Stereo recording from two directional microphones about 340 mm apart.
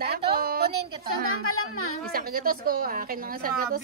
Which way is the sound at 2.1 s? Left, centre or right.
Right.